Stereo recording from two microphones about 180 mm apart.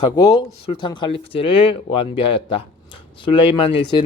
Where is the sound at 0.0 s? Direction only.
20° left (ahead or behind).